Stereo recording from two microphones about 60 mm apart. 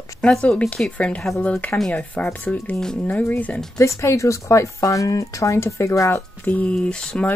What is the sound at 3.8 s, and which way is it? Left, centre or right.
Speech, left.